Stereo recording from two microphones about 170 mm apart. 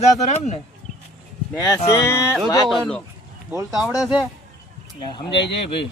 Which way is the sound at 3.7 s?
5° right (ahead or behind).